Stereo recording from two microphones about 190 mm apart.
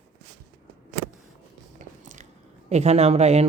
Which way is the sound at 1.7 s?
40° right (ahead or behind).